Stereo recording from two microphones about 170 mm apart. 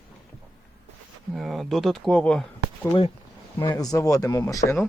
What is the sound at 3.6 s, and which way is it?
Speech, 25° left (ahead or behind).